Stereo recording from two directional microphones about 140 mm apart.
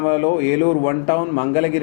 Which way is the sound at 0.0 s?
20° left (ahead or behind).